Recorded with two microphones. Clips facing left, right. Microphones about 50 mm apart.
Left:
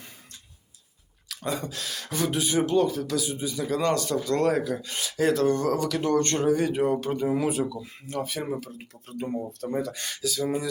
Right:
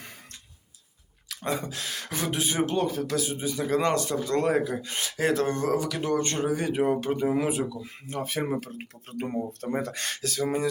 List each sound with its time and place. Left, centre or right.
1.6 s speech: right
5.7 s speech: centre
8.0 s speech: right